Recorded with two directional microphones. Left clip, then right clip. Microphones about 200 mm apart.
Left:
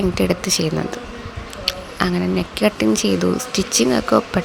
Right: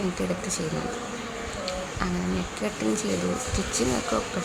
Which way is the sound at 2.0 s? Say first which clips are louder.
Left 13 dB; 45° left (ahead or behind).